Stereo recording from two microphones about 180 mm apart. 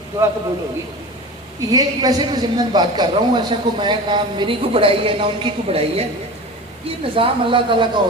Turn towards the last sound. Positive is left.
turn(degrees=-30)  # may be behind; listen again after turning